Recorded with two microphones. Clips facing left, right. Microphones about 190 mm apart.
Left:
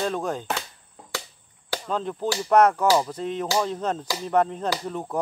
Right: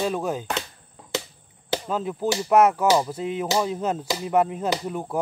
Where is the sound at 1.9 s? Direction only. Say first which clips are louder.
Right 1 dB; 5° right (ahead or behind).